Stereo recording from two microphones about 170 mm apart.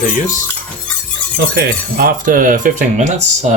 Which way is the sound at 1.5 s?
60° right (ahead or behind).